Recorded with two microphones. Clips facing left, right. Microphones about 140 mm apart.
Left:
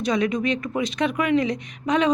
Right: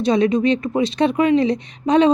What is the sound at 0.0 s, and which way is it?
A woman's voice, 30° right (ahead or behind).